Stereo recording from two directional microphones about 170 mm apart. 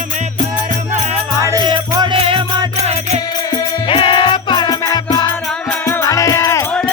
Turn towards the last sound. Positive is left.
turn(degrees=20)  # may be behind; listen again after turning